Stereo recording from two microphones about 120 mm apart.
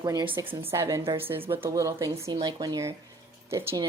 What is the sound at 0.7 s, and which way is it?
Speech, 25° right (ahead or behind).